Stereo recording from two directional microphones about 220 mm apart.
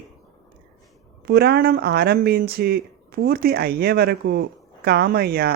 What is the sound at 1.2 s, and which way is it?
Speech, 45° right (ahead or behind).